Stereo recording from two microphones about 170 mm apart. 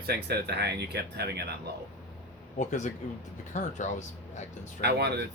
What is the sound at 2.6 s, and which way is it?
Speech, 45° left (ahead or behind).